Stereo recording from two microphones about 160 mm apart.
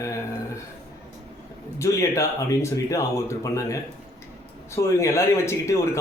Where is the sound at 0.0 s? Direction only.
20° left (ahead or behind).